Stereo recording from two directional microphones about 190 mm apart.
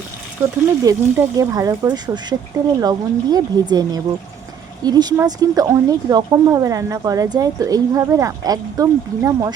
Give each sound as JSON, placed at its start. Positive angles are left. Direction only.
{"t": 0.4, "sound": "a woman's voice", "side_deg": -10}